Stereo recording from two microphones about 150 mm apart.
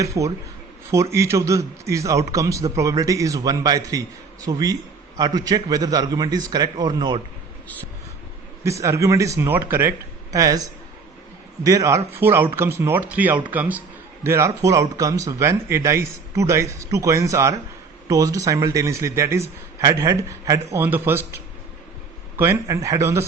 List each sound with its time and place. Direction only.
0.0 s a man's voice: 20° right (ahead or behind)
8.6 s a man's voice: 20° right (ahead or behind)
11.6 s a man's voice: 20° right (ahead or behind)
22.4 s a man's voice: 20° right (ahead or behind)